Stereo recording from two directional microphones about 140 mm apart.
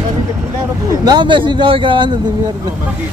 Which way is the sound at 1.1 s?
35° right (ahead or behind).